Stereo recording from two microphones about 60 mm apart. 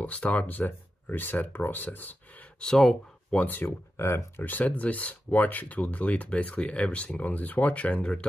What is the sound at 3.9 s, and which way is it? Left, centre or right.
Speech, left.